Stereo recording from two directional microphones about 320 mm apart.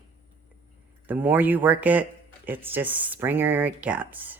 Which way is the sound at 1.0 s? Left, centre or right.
Centre.